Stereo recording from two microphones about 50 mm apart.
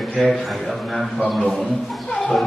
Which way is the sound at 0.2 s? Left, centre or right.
Centre.